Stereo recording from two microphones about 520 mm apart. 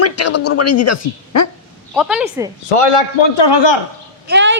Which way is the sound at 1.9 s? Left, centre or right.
Centre.